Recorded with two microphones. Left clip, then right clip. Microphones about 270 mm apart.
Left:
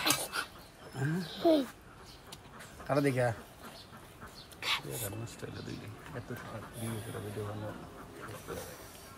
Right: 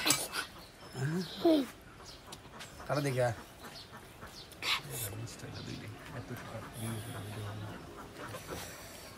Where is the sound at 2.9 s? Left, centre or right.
Left.